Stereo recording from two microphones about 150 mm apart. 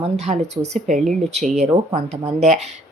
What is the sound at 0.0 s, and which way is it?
Speech, 45° right (ahead or behind).